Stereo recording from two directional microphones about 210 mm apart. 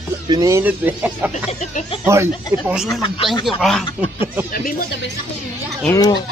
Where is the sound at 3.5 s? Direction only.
Centre (ahead or behind).